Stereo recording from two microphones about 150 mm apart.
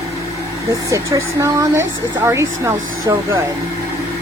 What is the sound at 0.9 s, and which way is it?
Speech, 20° right (ahead or behind).